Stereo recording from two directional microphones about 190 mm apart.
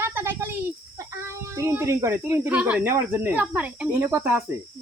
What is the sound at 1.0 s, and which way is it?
Speech, 15° right (ahead or behind).